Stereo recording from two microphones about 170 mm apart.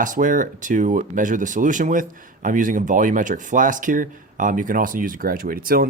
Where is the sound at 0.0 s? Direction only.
50° right (ahead or behind).